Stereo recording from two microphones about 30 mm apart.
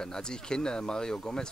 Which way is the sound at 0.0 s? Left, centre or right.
Left.